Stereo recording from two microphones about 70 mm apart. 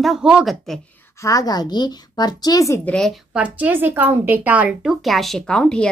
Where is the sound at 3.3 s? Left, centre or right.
Right.